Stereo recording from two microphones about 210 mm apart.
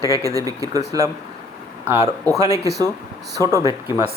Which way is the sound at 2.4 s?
15° right (ahead or behind).